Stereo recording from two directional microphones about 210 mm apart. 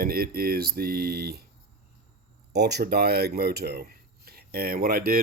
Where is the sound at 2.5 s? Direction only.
50° right (ahead or behind).